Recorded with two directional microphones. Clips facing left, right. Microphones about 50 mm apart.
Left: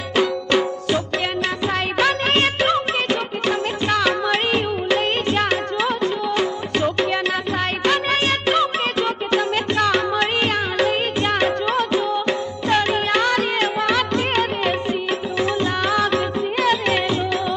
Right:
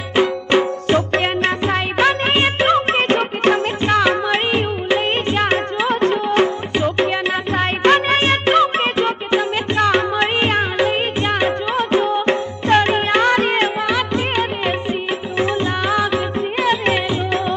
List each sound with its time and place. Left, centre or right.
0.2 s music: right
0.9 s music: right
3.8 s music: right
5.9 s music: right; by 11.9 s centre
11.9 s music: right
13.8 s music: centre
15.8 s music: centre